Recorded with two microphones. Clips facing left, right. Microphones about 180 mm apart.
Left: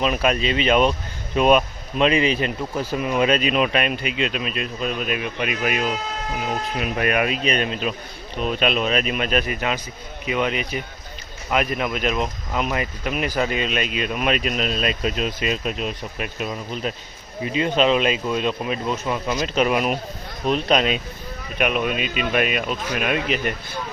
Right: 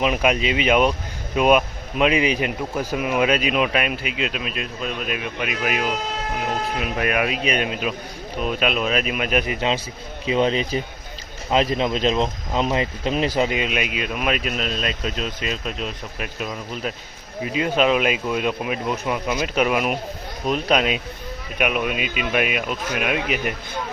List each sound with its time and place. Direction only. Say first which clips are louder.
0.0 s speech: right 1 dB; 15° right (ahead or behind)